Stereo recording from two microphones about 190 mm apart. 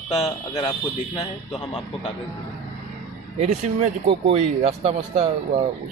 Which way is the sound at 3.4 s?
35° right (ahead or behind).